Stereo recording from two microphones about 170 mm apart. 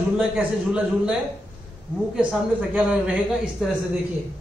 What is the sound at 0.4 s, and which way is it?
Speech, 5° right (ahead or behind).